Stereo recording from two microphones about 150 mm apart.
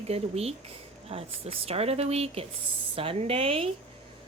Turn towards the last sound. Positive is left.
turn(degrees=-40)  # may be behind; listen again after turning